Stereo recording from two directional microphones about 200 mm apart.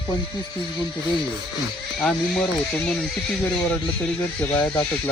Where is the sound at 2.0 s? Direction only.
5° left (ahead or behind).